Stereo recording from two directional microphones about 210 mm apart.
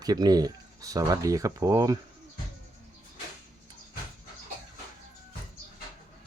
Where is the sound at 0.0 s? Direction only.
20° right (ahead or behind).